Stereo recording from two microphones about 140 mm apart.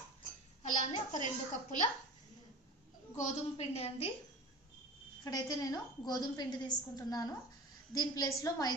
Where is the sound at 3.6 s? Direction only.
45° left (ahead or behind).